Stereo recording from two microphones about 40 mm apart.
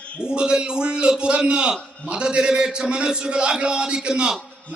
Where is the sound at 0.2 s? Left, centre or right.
Right.